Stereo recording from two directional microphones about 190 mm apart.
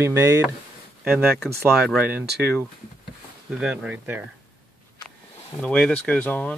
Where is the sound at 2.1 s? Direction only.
60° right (ahead or behind).